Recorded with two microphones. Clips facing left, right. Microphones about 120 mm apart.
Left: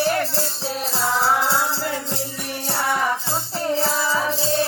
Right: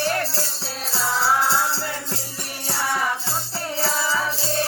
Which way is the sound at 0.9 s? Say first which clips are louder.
Left 1 dB; 20° left (ahead or behind).